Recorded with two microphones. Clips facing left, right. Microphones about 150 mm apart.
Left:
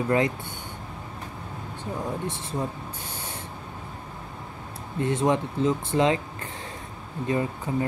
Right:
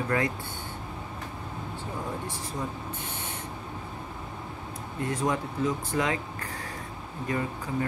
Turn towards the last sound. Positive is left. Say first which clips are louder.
# left 3 dB
turn(degrees=20)  # may be behind; listen again after turning